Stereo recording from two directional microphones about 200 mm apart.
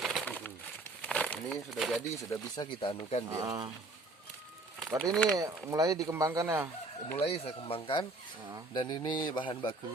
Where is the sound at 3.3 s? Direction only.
15° right (ahead or behind).